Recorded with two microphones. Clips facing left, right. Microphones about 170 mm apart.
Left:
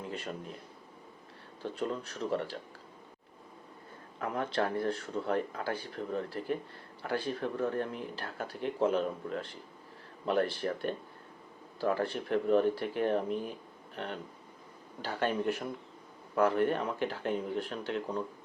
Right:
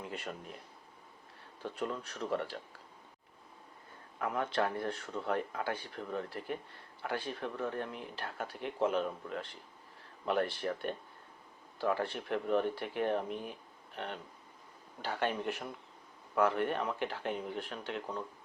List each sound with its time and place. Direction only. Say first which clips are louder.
1.7 s speech: left 3 dB; 35° left (ahead or behind)
4.2 s speech: left 1 dB; 35° left (ahead or behind)